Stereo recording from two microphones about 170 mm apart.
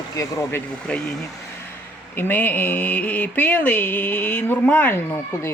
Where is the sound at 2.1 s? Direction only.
10° left (ahead or behind).